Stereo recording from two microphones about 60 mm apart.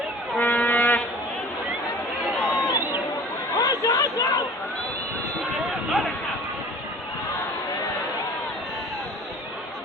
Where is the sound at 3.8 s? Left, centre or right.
Left.